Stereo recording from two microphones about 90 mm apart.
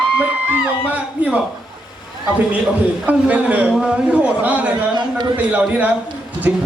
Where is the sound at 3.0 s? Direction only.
15° right (ahead or behind).